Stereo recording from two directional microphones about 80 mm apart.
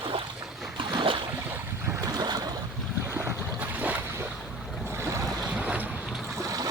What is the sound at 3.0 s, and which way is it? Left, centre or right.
Boat, right.